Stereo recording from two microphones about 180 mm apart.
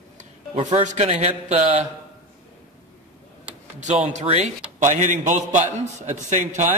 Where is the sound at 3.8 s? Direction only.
40° right (ahead or behind).